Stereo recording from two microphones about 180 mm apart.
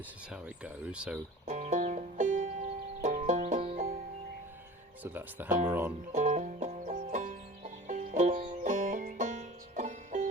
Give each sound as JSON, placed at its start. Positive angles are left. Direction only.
{"t": 0.3, "sound": "speech", "side_deg": -5}
{"t": 1.5, "sound": "music", "side_deg": -40}
{"t": 5.0, "sound": "speech", "side_deg": -10}
{"t": 6.1, "sound": "music", "side_deg": -45}